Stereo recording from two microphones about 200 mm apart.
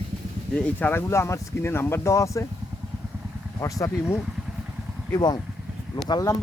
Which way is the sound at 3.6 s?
15° left (ahead or behind).